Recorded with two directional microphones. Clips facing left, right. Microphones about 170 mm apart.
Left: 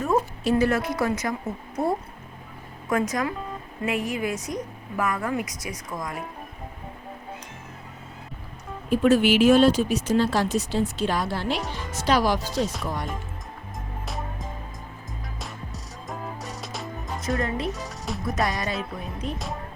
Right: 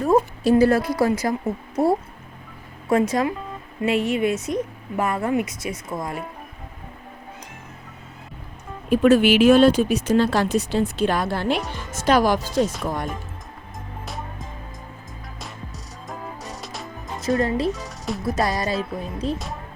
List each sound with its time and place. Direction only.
0.0 s music: 35° right (ahead or behind)
0.5 s speech: 35° right (ahead or behind)
2.9 s a woman's voice: 30° right (ahead or behind)
8.9 s speech: 65° right (ahead or behind)
14.0 s music: centre (ahead or behind)
17.2 s speech: 35° right (ahead or behind)
17.7 s speech: centre (ahead or behind)
18.3 s speech: 35° right (ahead or behind)